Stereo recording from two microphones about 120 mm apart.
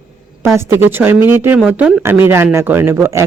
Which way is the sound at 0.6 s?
20° right (ahead or behind).